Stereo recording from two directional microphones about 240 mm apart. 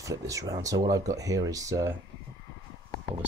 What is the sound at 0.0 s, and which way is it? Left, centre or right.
Speech, centre.